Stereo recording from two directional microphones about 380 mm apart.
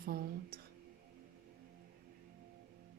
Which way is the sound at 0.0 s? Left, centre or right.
Right.